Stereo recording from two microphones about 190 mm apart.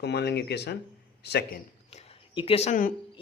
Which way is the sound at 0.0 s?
60° left (ahead or behind).